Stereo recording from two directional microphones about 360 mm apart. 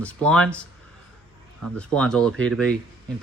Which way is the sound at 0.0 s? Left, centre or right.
Centre.